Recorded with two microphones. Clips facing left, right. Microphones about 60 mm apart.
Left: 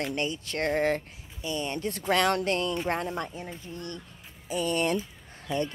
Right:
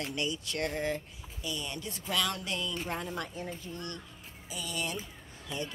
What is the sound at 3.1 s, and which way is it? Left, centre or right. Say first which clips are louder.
Speech: left 3 dB; left.